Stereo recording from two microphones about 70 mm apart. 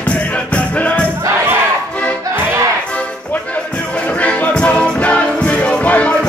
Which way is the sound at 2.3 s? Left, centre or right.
Right.